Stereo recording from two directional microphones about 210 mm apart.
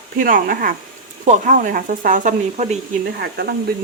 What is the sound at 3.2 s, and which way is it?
Speech, 50° right (ahead or behind).